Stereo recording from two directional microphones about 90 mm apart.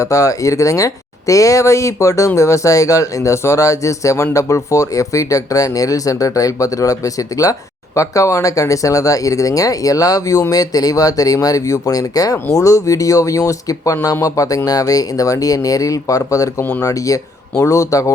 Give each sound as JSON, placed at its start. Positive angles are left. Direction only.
{"t": 0.0, "sound": "speech", "side_deg": 35}